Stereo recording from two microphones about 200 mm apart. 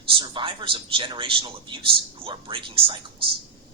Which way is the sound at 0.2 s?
25° right (ahead or behind).